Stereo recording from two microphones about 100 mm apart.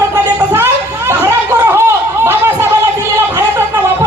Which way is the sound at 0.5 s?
25° right (ahead or behind).